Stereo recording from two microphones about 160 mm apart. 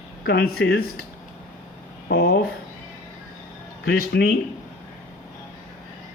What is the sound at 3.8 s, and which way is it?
Speech, 80° left.